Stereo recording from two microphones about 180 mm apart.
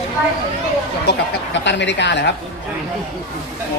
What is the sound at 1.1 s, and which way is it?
Speech, 75° left (ahead or behind).